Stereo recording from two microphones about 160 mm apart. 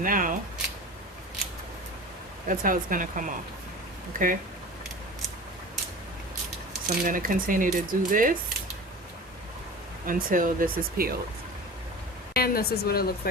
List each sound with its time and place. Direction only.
0.0 s speech: 60° right (ahead or behind)
2.5 s speech: 55° right (ahead or behind)
6.8 s speech: 65° right (ahead or behind)
10.1 s speech: 60° right (ahead or behind)
12.3 s speech: 70° left (ahead or behind)